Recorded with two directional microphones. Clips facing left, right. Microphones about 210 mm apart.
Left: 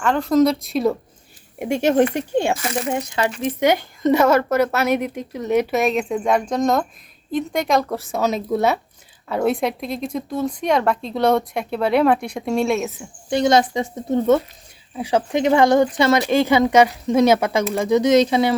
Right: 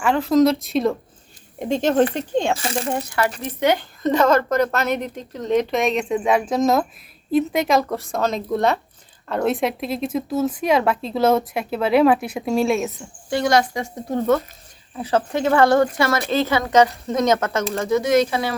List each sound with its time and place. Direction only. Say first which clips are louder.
0.0 s a woman's voice: even; 5° right (ahead or behind)
2.6 s speech: left 1 dB; 30° right (ahead or behind)
2.8 s a woman's voice: left 1 dB; 15° left (ahead or behind); by 13.1 s centre (ahead or behind)
13.3 s a woman's voice: left 2 dB; 20° left (ahead or behind)